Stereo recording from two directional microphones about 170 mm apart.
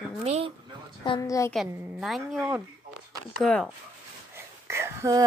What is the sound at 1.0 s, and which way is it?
Speech, 25° left (ahead or behind).